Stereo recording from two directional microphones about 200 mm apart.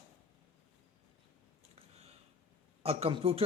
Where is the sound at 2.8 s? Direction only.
30° right (ahead or behind).